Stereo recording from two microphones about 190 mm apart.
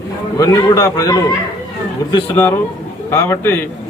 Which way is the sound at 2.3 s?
10° left (ahead or behind).